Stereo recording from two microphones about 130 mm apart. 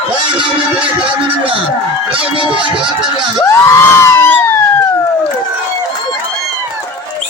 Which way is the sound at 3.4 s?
20° left (ahead or behind).